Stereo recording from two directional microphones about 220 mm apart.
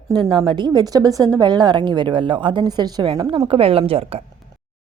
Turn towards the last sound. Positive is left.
turn(degrees=-25)  # may be behind; listen again after turning